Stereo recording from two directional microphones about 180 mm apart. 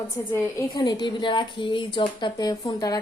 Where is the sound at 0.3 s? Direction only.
20° left (ahead or behind).